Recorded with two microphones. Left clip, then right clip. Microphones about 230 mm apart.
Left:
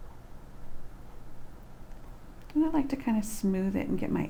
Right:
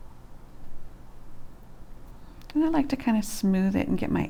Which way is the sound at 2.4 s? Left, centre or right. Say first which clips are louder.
Right 3 dB; right.